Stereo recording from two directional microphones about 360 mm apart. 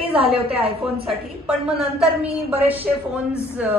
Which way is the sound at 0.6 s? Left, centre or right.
Centre.